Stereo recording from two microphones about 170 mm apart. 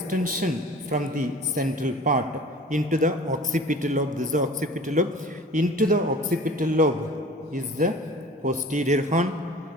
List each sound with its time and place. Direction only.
0.1 s a woman's voice: 50° right (ahead or behind)